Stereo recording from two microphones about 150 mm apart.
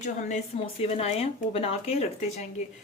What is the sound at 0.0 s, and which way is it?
A woman's voice, 55° left (ahead or behind).